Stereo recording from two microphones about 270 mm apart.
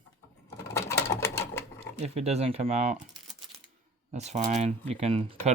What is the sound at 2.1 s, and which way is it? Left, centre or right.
Speech, right.